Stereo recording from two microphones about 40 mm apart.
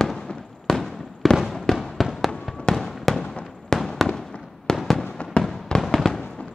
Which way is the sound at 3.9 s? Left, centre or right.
Centre.